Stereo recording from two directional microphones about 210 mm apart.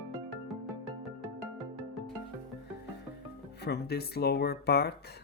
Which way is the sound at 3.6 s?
50° left (ahead or behind).